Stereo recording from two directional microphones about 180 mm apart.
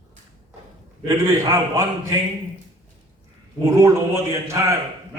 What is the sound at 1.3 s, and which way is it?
Speech, 15° right (ahead or behind).